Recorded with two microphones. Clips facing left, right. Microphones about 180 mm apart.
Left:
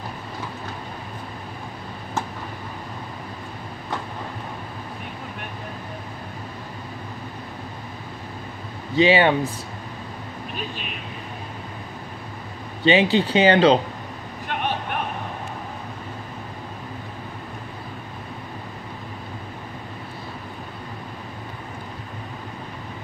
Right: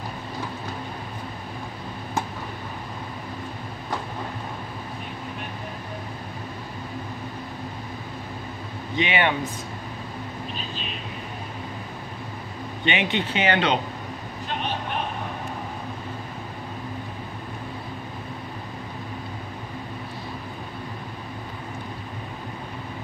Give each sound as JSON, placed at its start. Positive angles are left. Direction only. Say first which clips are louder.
{"t": 8.9, "sound": "speech", "louder": "left 7 dB", "side_deg": 30}
{"t": 12.8, "sound": "speech", "louder": "left 8 dB", "side_deg": 35}